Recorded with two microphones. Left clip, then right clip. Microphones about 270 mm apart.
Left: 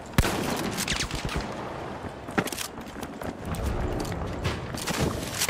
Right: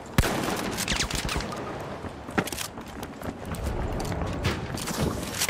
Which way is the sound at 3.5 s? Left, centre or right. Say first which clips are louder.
Left 2 dB; centre.